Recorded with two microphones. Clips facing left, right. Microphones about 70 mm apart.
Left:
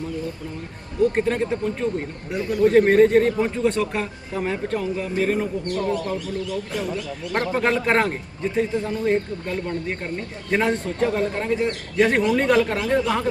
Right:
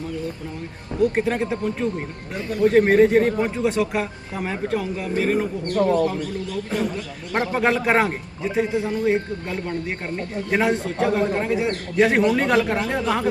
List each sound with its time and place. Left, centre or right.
1.0 s speech: centre
7.3 s a man's voice: centre